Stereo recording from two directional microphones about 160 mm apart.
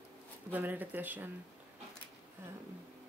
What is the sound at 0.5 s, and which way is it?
Speech, 10° right (ahead or behind).